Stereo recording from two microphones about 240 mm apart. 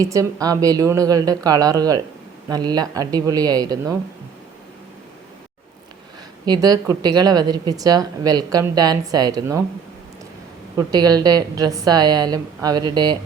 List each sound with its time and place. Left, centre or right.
0.0 s a woman's voice: centre
6.4 s a woman's voice: centre
10.8 s a woman's voice: centre